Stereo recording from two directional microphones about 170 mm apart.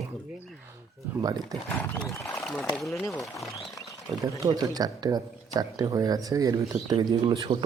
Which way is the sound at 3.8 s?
20° left (ahead or behind).